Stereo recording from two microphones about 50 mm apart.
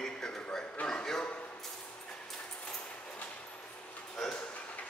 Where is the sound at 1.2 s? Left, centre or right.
Left.